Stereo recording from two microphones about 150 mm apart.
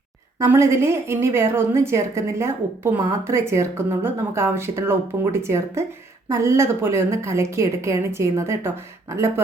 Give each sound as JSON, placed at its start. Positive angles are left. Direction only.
{"t": 0.3, "sound": "a woman's voice", "side_deg": -20}